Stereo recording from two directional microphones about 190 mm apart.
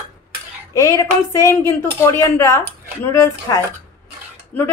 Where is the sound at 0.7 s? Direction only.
15° left (ahead or behind).